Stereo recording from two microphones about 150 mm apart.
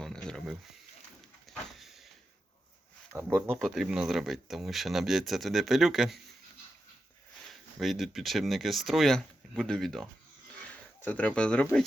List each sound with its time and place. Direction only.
0.0 s a sound: 5° left (ahead or behind)
3.2 s speech: 15° right (ahead or behind)
3.6 s speech: 5° right (ahead or behind)
7.5 s speech: centre (ahead or behind)